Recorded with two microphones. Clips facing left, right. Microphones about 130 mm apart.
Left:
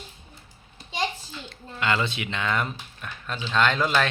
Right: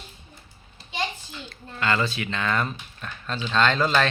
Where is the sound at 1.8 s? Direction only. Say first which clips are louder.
Right 1 dB; 15° left (ahead or behind).